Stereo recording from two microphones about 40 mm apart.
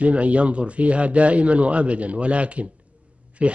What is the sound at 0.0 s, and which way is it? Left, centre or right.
Speech, right.